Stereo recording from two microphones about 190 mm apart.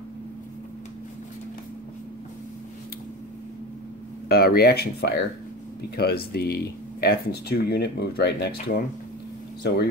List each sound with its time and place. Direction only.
4.3 s speech: 55° left (ahead or behind)